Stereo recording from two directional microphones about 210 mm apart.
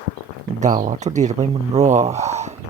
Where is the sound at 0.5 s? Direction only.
35° right (ahead or behind).